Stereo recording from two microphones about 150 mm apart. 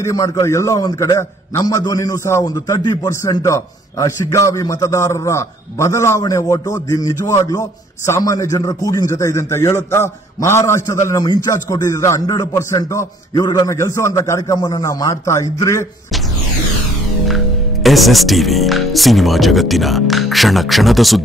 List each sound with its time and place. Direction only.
0.0 s a man's voice: 20° left (ahead or behind)
17.8 s speech: centre (ahead or behind)